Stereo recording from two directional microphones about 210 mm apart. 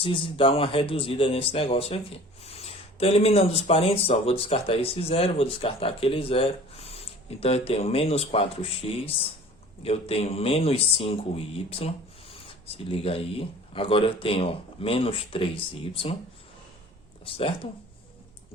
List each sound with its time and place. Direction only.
0.0 s speech: 25° left (ahead or behind)
17.2 s speech: 25° left (ahead or behind)